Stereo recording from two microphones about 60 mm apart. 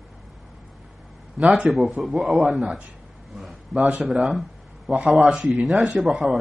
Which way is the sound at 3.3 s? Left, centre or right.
Centre.